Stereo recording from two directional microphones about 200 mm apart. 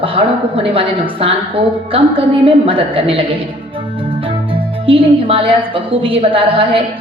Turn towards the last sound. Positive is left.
turn(degrees=-25)  # may be behind; listen again after turning